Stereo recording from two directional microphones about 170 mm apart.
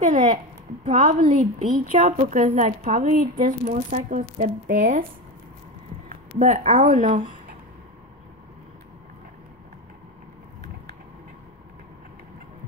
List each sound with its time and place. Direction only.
0.0 s a child's voice: 45° right (ahead or behind)
6.0 s speech: 50° right (ahead or behind)